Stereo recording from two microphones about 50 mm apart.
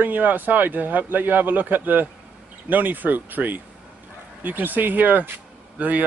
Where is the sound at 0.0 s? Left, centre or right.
Right.